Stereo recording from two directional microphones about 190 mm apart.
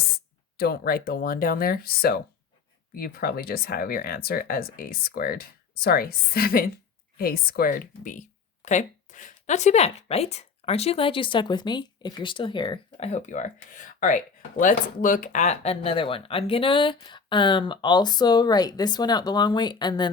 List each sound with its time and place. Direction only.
0.5 s speech: 55° left (ahead or behind); by 20.1 s 20° left (ahead or behind)